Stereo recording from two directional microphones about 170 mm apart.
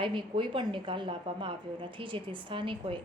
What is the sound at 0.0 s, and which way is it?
A woman's voice, 30° right (ahead or behind).